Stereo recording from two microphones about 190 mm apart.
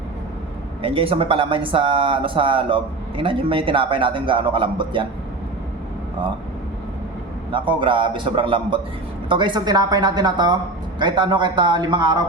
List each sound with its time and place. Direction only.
0.8 s speech: 30° right (ahead or behind)
7.5 s speech: 25° right (ahead or behind)